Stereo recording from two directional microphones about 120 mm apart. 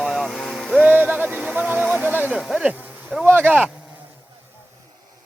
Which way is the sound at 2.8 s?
10° right (ahead or behind).